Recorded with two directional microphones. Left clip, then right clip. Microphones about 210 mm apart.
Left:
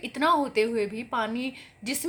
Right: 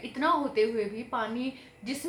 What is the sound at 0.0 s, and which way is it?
A woman's voice, 50° left (ahead or behind).